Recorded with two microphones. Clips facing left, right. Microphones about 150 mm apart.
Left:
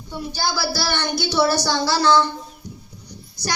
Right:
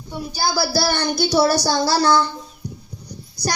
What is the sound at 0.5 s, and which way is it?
A child's voice, 40° right (ahead or behind).